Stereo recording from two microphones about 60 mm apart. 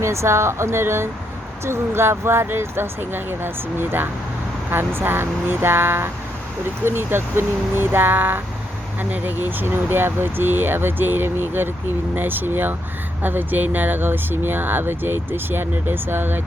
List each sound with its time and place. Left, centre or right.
0.0 s speech: right